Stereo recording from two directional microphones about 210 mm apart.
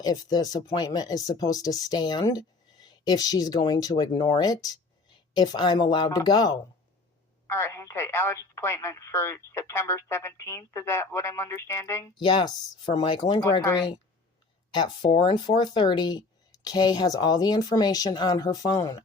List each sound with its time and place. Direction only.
0.0 s speech: 15° left (ahead or behind)